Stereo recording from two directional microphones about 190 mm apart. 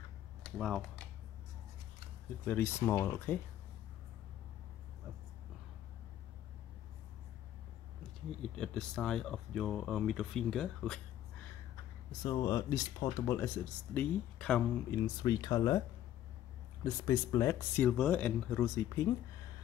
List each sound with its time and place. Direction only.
0.4 s speech: centre (ahead or behind)
2.4 s speech: 10° left (ahead or behind)
8.4 s speech: 5° left (ahead or behind)
12.1 s speech: 20° left (ahead or behind)
15.0 s speech: 20° left (ahead or behind)
16.8 s speech: 20° left (ahead or behind)